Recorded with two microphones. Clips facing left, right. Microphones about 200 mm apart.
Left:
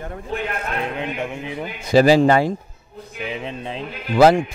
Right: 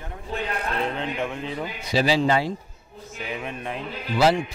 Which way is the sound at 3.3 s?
20° left (ahead or behind).